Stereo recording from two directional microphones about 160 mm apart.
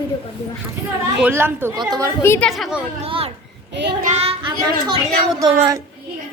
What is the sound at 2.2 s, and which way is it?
Speech, 15° left (ahead or behind).